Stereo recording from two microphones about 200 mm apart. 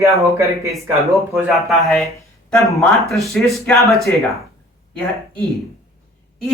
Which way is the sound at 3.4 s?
5° left (ahead or behind).